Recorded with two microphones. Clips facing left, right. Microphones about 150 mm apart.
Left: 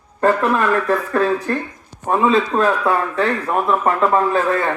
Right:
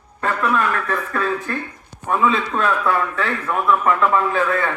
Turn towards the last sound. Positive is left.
turn(degrees=35)  # may be behind; listen again after turning